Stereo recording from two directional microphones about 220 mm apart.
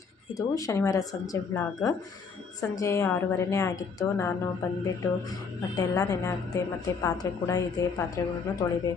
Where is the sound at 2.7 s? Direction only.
15° left (ahead or behind).